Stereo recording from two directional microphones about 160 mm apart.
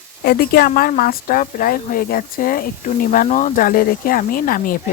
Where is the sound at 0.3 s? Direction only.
70° left (ahead or behind).